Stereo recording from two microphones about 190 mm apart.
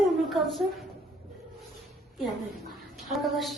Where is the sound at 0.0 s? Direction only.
Centre (ahead or behind).